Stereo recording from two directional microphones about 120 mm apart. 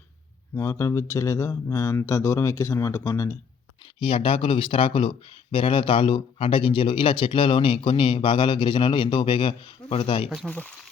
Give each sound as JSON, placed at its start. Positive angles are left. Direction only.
{"t": 0.5, "sound": "a man's voice", "side_deg": 25}
{"t": 4.0, "sound": "speech", "side_deg": 45}
{"t": 10.4, "sound": "speech", "side_deg": 10}